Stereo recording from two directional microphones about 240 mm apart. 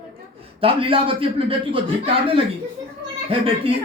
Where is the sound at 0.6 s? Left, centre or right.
Right.